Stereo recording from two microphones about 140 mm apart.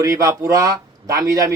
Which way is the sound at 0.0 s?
25° right (ahead or behind).